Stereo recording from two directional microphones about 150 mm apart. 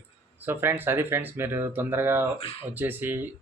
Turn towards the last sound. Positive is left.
turn(degrees=-15)  # may be behind; listen again after turning